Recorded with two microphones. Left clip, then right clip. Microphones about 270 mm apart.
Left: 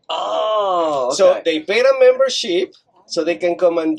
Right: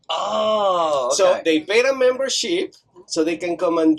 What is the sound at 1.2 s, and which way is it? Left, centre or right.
Speech, right.